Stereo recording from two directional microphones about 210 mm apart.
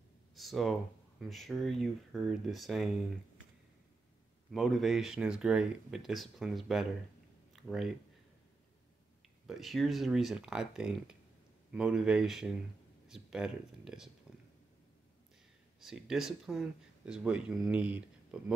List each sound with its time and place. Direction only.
0.4 s speech: centre (ahead or behind)
4.5 s speech: centre (ahead or behind)
9.5 s speech: centre (ahead or behind)
15.8 s speech: centre (ahead or behind)